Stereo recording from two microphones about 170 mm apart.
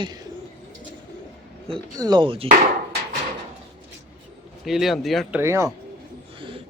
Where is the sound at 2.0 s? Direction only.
25° right (ahead or behind).